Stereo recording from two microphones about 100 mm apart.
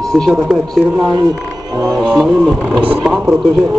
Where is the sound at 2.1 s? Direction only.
5° right (ahead or behind).